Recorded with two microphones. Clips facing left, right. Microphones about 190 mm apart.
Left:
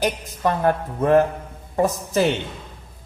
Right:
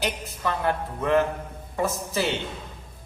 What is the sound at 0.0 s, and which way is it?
A woman's voice, 45° left (ahead or behind).